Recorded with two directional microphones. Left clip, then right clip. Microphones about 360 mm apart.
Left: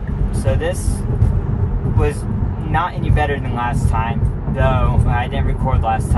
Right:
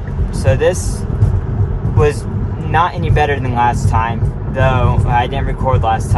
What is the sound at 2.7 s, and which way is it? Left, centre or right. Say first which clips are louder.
Speech: right 6 dB; right.